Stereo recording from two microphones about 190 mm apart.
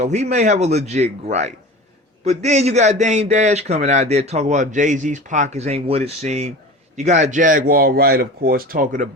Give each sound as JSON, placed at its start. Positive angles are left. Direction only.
{"t": 0.0, "sound": "a man's voice", "side_deg": -35}